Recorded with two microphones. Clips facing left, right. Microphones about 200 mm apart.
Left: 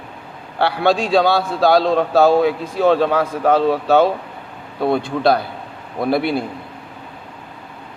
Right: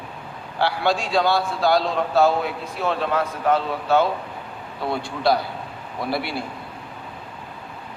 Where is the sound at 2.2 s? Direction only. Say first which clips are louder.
Left 7 dB; 80° left.